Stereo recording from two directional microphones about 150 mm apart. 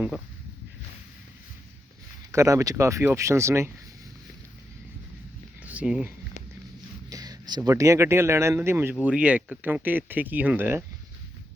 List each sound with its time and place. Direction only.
2.3 s speech: 20° right (ahead or behind)
5.6 s speech: 10° right (ahead or behind)
7.1 s speech: 25° right (ahead or behind)